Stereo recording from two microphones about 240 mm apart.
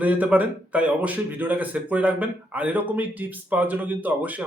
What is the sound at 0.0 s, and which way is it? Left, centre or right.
A man's voice, centre.